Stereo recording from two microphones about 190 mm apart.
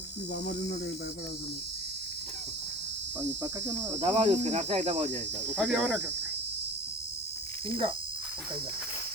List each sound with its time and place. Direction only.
3.2 s cricket: 10° right (ahead or behind)
4.0 s cricket: 35° right (ahead or behind)
5.6 s cricket: 10° right (ahead or behind)